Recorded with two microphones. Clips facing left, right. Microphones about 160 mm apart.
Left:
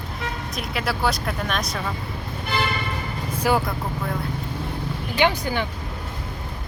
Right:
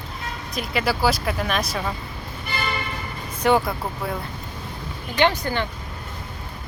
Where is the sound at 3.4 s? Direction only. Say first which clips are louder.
Right 3 dB; centre (ahead or behind).